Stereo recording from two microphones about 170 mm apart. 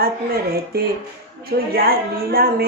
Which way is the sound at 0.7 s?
65° right (ahead or behind).